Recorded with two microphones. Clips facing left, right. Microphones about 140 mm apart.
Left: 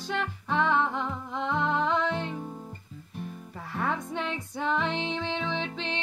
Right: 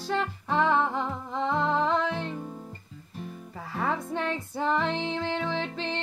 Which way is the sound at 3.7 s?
5° right (ahead or behind).